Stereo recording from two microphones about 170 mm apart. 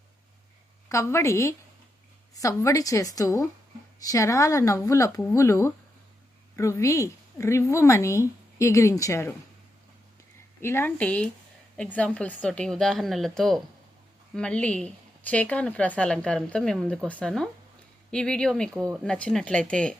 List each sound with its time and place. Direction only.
0.9 s a woman's voice: 15° left (ahead or behind)
10.6 s a woman's voice: 15° left (ahead or behind)